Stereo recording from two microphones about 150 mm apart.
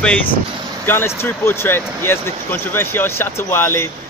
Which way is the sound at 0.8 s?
15° left (ahead or behind).